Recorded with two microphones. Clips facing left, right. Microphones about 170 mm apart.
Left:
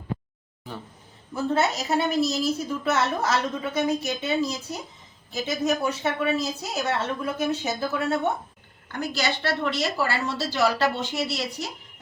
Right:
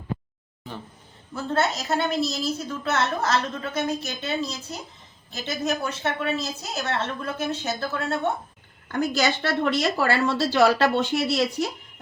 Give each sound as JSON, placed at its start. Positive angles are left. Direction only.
{"t": 1.3, "sound": "a woman's voice", "side_deg": 10}
{"t": 8.9, "sound": "speech", "side_deg": -50}